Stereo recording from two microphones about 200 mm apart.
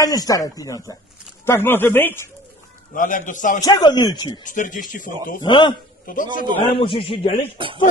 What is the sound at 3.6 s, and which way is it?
Speech, 20° left (ahead or behind).